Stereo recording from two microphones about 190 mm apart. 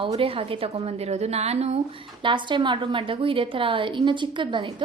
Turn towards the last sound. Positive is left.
turn(degrees=-25)  # may be behind; listen again after turning